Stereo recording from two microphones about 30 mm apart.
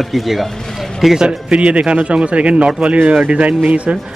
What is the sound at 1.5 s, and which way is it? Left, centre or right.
Speech, right.